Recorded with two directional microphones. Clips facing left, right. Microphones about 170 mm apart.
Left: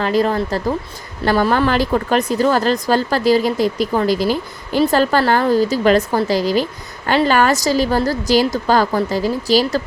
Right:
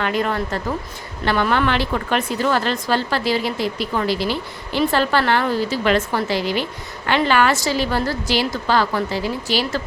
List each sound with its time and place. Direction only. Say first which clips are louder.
0.0 s speech: left 5 dB; 35° left (ahead or behind)